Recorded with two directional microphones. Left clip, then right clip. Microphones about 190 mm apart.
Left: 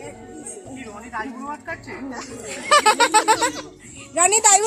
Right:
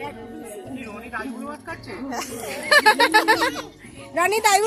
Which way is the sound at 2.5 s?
20° left (ahead or behind).